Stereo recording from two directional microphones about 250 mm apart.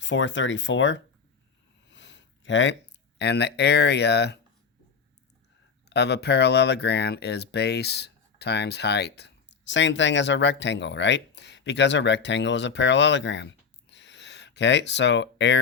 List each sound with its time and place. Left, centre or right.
0.0 s speech: left
1.9 s a sound: left
3.2 s speech: left
5.9 s speech: left